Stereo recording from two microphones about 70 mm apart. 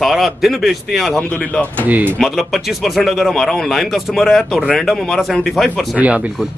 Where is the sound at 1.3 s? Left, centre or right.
Centre.